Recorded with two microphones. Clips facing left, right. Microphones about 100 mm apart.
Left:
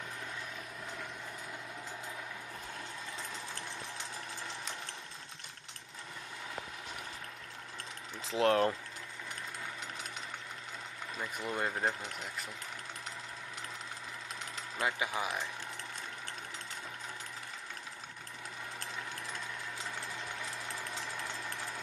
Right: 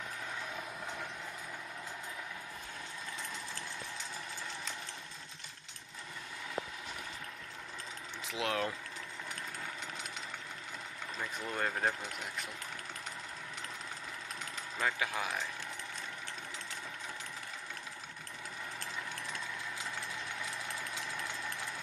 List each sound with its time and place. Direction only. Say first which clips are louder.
8.3 s speech: left 7 dB; 40° left (ahead or behind)
11.1 s speech: left 1 dB; 10° left (ahead or behind)
14.8 s speech: left 1 dB; 15° left (ahead or behind)